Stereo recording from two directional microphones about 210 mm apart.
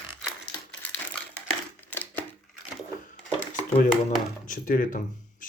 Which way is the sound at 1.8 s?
10° left (ahead or behind).